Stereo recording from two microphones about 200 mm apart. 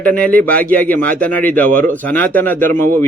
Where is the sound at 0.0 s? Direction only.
5° left (ahead or behind).